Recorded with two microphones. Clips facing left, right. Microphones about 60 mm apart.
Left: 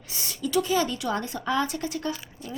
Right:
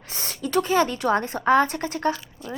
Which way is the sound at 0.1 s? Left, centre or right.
Right.